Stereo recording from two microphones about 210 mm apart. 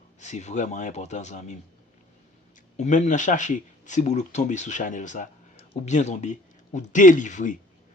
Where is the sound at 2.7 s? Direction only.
35° left (ahead or behind).